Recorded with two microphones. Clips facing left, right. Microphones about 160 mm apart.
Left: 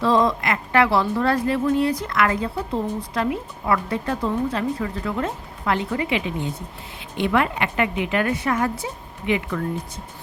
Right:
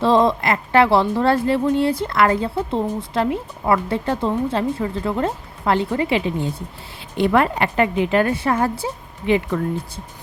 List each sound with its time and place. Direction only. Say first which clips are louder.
0.0 s a woman's voice: right 3 dB; 25° right (ahead or behind)